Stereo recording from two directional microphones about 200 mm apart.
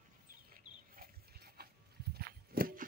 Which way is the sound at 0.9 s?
50° right (ahead or behind).